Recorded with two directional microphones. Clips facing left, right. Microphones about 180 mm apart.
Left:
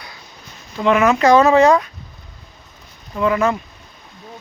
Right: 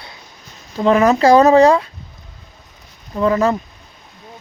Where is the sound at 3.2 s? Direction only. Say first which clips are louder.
Right 2 dB; 35° right (ahead or behind).